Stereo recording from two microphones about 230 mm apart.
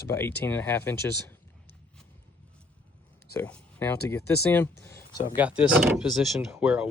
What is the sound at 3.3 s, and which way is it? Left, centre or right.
Speech, centre.